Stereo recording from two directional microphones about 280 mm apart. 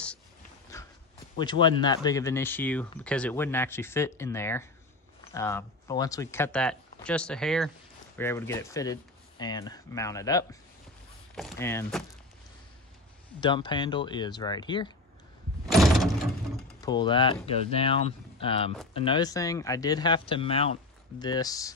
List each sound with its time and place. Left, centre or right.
0.7 s dog: centre
1.4 s speech: centre
13.4 s speech: centre
15.7 s door: centre
16.8 s speech: centre